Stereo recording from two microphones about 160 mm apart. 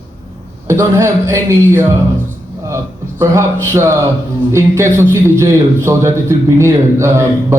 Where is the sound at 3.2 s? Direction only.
15° right (ahead or behind).